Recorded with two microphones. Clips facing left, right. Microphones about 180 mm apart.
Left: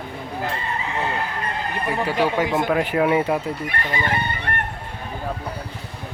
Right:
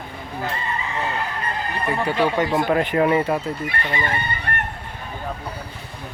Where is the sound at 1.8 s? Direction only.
5° left (ahead or behind).